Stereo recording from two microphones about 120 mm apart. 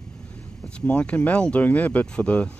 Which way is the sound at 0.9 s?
10° left (ahead or behind).